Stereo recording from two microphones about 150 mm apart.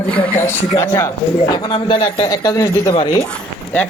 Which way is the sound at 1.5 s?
30° left (ahead or behind).